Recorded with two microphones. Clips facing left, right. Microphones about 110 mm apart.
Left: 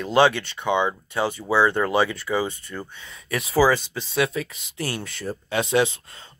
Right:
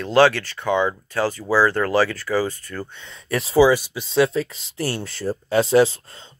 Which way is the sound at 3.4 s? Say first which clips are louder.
Right 4 dB; 30° right (ahead or behind).